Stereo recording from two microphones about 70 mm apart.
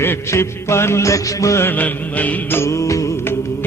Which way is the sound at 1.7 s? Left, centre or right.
Left.